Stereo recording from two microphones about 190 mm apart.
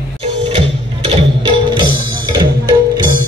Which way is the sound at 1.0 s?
25° right (ahead or behind).